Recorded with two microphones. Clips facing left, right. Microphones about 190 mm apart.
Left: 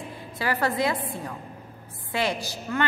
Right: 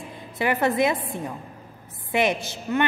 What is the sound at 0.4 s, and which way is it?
Speech, 20° right (ahead or behind).